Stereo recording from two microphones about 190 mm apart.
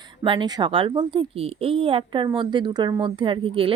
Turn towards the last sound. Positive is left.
turn(degrees=-30)  # may be behind; listen again after turning